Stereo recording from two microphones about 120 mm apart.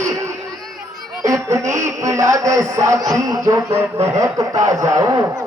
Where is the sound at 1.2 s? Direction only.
25° right (ahead or behind).